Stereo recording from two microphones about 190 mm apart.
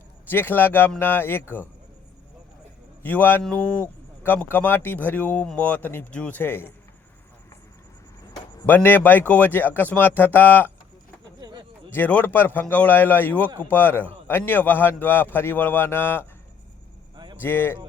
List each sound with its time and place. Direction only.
0.3 s speech: 10° left (ahead or behind)
3.0 s speech: 10° left (ahead or behind)
8.6 s speech: 10° left (ahead or behind)
11.3 s a sound: 20° right (ahead or behind)
11.9 s speech: 10° left (ahead or behind)
17.4 s speech: 10° left (ahead or behind)